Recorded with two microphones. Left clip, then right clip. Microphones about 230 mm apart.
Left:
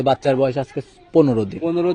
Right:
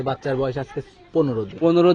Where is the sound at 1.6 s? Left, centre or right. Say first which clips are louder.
Right 6 dB; centre.